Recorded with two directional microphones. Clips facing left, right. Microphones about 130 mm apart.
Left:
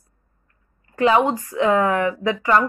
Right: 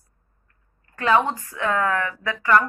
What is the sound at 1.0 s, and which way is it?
Speech, 15° left (ahead or behind).